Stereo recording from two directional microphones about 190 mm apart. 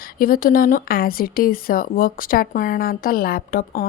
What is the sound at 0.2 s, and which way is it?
Speech, 50° left (ahead or behind).